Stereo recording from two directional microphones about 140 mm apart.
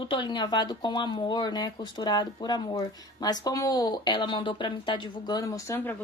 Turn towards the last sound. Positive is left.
turn(degrees=15)  # may be behind; listen again after turning